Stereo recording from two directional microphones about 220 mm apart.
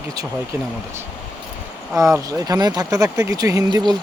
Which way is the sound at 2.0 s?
15° right (ahead or behind).